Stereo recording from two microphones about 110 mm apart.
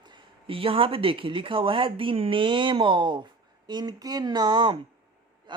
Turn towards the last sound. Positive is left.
turn(degrees=-40)  # may be behind; listen again after turning